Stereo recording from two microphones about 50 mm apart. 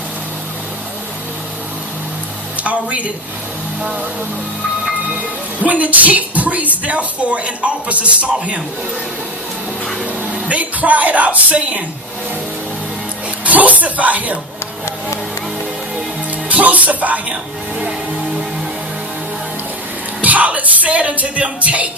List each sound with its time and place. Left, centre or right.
2.6 s speech: right
5.6 s speech: right
10.5 s speech: right
13.4 s speech: right
16.5 s speech: right
20.2 s speech: right